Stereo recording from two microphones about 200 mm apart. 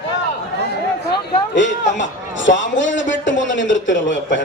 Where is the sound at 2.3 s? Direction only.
65° left (ahead or behind).